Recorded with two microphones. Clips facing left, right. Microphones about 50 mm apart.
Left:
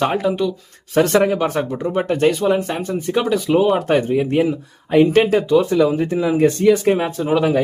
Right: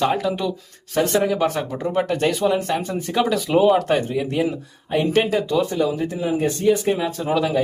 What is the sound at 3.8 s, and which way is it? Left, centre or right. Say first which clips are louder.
Speech: left 4 dB; left.